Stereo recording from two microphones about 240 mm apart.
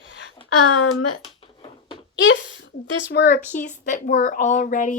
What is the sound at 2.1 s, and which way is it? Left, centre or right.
Speech, left.